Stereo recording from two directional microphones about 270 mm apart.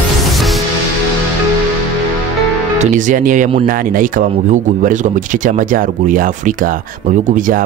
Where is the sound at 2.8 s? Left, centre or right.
Right.